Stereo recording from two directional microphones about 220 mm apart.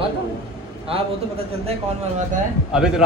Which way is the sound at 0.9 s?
25° right (ahead or behind).